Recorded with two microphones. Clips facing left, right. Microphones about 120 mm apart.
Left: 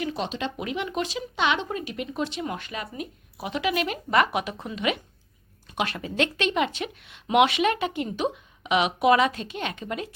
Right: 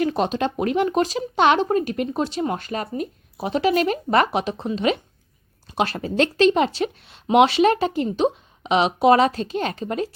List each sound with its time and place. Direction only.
0.0 s speech: 45° right (ahead or behind)